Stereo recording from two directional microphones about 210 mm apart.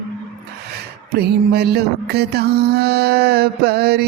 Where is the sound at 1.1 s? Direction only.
50° right (ahead or behind).